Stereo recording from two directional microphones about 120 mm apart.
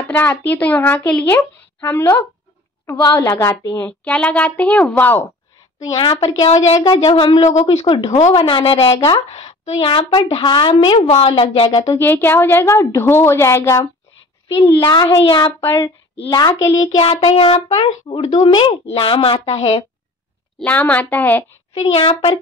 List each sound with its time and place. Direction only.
0.1 s speech: 15° left (ahead or behind)
2.9 s a woman's voice: 30° left (ahead or behind)
3.8 s speech: 10° left (ahead or behind)
5.8 s a child's voice: 35° left (ahead or behind)
6.4 s speech: 60° left (ahead or behind)
7.1 s a woman's voice: 40° left (ahead or behind)
10.0 s a child's voice: 40° left (ahead or behind)
11.8 s a woman's voice: 20° left (ahead or behind)
14.8 s a child's voice: 35° left (ahead or behind)
15.6 s a woman's voice: 25° left (ahead or behind)
17.0 s a woman's voice: 45° left (ahead or behind)
20.5 s speech: 10° left (ahead or behind)
21.7 s a woman's voice: 50° left (ahead or behind)